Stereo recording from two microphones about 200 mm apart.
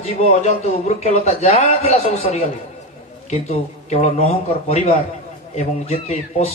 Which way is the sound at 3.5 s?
35° left (ahead or behind).